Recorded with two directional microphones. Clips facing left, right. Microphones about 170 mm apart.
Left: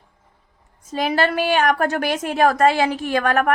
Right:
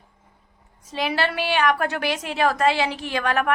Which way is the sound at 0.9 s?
45° left (ahead or behind).